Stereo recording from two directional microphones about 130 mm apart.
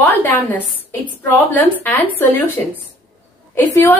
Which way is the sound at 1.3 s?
15° left (ahead or behind).